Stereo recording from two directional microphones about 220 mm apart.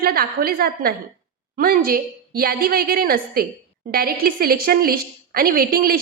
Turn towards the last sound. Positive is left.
turn(degrees=-40)  # may be behind; listen again after turning